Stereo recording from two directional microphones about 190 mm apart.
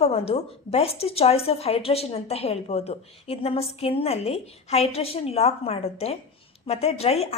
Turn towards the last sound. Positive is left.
turn(degrees=35)  # may be behind; listen again after turning